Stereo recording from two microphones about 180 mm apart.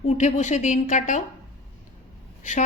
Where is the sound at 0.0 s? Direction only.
40° left (ahead or behind).